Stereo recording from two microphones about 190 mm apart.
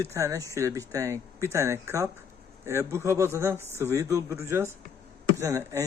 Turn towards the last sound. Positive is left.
turn(degrees=-15)  # may be behind; listen again after turning